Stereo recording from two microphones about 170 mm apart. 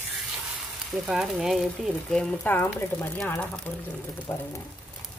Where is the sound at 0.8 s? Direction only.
Centre (ahead or behind).